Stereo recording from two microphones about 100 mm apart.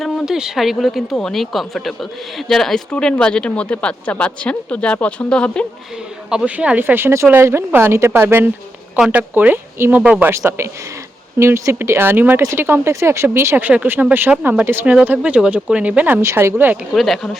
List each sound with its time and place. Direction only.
0.0 s speech: centre (ahead or behind)
6.3 s speech: 10° right (ahead or behind)
9.0 s speech: 10° right (ahead or behind)
10.0 s speech: 10° right (ahead or behind)
10.2 s speech: 25° right (ahead or behind)
16.9 s speech: centre (ahead or behind)